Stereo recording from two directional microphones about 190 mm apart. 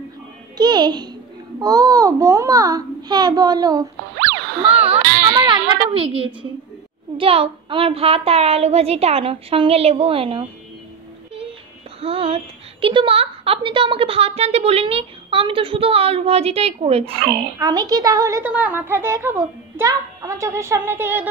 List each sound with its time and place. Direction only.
0.6 s a child's voice: 20° right (ahead or behind)
12.0 s a woman's voice: 30° right (ahead or behind)
17.6 s a woman's voice: 20° right (ahead or behind)